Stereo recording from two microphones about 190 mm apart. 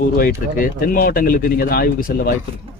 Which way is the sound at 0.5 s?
50° left (ahead or behind).